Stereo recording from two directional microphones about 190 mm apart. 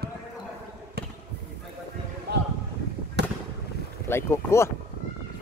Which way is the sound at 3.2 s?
65° right (ahead or behind).